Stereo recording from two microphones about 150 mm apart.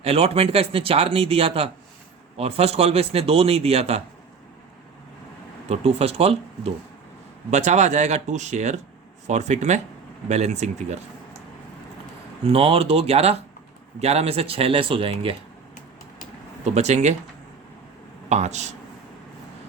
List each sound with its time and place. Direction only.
0.0 s a man's voice: 40° right (ahead or behind)
5.6 s a man's voice: 45° right (ahead or behind)
12.5 s a man's voice: 40° right (ahead or behind)
16.6 s a man's voice: 50° right (ahead or behind)
18.3 s a man's voice: 50° right (ahead or behind)